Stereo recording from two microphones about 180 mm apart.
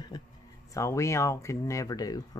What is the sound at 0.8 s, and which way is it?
Speech, 15° left (ahead or behind).